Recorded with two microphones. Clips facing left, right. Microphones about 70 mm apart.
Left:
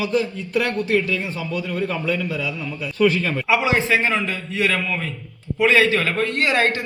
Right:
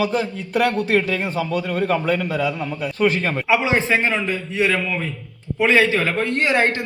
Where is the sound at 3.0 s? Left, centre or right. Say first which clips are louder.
Left 1 dB; right.